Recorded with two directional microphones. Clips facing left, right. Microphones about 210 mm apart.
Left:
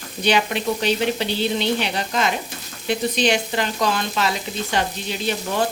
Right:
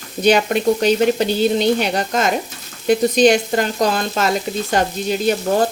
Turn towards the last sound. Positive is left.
turn(degrees=-45)  # may be behind; listen again after turning